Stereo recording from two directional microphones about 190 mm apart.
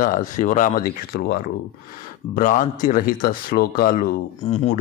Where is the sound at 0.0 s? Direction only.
45° left (ahead or behind).